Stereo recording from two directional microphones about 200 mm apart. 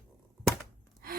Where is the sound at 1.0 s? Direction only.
50° right (ahead or behind).